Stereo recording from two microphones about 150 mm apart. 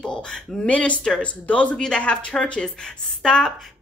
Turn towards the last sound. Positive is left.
turn(degrees=5)  # may be behind; listen again after turning